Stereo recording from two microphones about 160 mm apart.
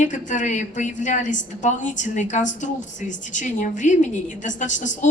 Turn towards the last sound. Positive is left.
turn(degrees=50)  # may be behind; listen again after turning